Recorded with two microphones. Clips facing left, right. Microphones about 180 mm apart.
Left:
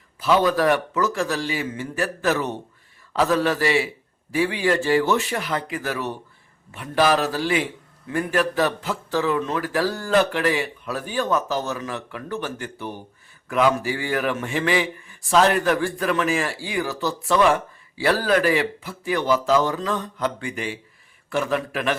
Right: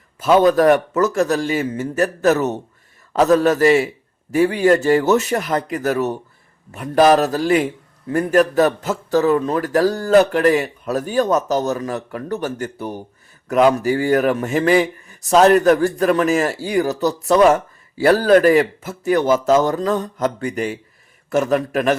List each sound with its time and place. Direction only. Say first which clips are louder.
0.2 s a man's voice: right 6 dB; 45° right (ahead or behind)